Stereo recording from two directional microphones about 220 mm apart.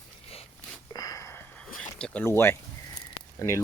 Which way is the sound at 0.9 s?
15° left (ahead or behind).